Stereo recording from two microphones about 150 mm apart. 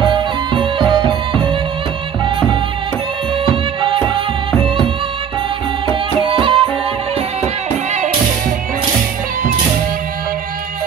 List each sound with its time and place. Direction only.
0.0 s music: 30° right (ahead or behind)
3.8 s music: 35° right (ahead or behind)
6.2 s music: 35° right (ahead or behind)